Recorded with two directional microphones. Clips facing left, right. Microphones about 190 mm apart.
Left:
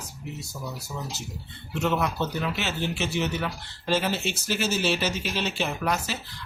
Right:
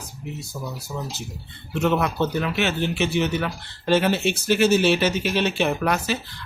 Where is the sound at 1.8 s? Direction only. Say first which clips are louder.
Right 5 dB; 60° right (ahead or behind).